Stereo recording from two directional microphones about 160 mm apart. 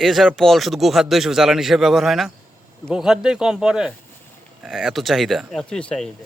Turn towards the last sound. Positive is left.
turn(degrees=5)  # may be behind; listen again after turning